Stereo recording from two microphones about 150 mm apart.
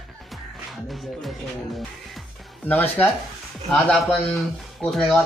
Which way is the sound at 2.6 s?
15° left (ahead or behind).